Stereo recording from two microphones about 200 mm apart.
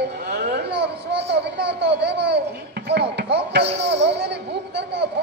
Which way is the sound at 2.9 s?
55° right (ahead or behind).